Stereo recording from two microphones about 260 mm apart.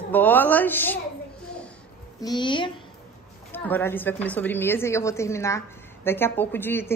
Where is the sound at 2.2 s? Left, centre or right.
Centre.